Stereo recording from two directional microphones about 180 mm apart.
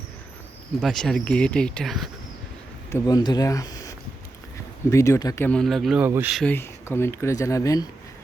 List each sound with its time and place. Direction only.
0.8 s speech: centre (ahead or behind)
2.9 s speech: 20° left (ahead or behind); by 6.1 s centre (ahead or behind)
6.1 s speech: 10° right (ahead or behind)
6.3 s speech: 10° left (ahead or behind)